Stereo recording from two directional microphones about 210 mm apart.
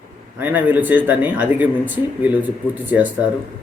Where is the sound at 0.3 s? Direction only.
10° right (ahead or behind).